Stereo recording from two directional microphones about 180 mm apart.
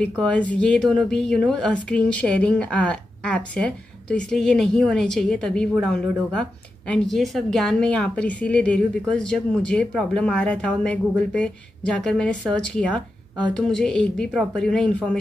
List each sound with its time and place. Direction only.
0.2 s a woman's voice: 5° left (ahead or behind)